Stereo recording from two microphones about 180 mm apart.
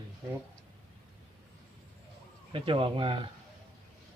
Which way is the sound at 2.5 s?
30° right (ahead or behind).